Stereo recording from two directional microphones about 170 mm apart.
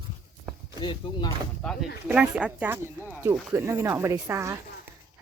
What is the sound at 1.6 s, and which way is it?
Speech, 5° left (ahead or behind).